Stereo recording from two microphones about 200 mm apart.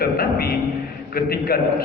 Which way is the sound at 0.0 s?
50° left (ahead or behind).